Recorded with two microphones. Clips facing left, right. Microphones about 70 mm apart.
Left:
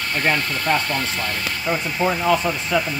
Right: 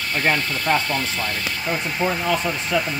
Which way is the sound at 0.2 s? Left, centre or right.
Right.